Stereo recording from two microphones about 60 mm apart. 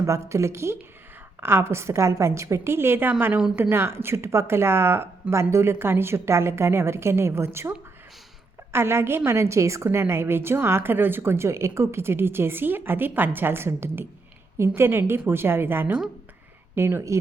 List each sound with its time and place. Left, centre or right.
0.0 s a woman's voice: right
8.7 s a woman's voice: right